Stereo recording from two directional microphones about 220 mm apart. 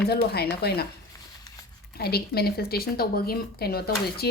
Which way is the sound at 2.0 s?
45° left (ahead or behind).